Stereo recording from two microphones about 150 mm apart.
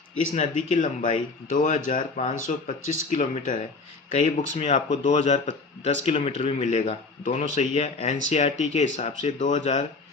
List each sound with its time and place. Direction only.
0.3 s speech: 50° left (ahead or behind)
4.5 s speech: 45° left (ahead or behind)